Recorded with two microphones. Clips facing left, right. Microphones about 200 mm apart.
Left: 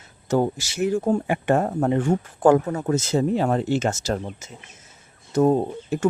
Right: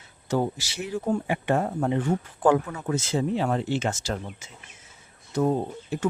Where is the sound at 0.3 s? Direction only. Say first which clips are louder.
Left 4 dB; 50° left (ahead or behind).